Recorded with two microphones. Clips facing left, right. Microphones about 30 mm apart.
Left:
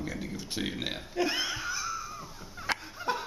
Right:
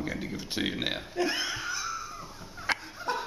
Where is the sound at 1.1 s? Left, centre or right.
Centre.